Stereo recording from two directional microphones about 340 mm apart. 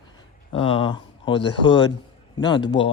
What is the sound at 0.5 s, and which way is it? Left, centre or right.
Speech, centre.